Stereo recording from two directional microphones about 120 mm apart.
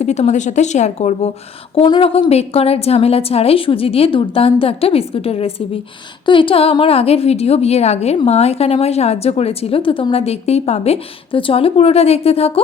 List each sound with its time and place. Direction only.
0.0 s speech: 70° left (ahead or behind)
1.7 s a woman's voice: 45° left (ahead or behind)